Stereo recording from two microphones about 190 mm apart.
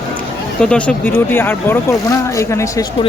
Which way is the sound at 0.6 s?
5° left (ahead or behind).